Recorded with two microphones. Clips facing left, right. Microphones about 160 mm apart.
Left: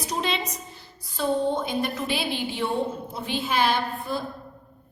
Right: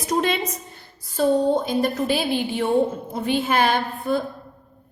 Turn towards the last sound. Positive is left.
turn(degrees=-55)  # may be behind; listen again after turning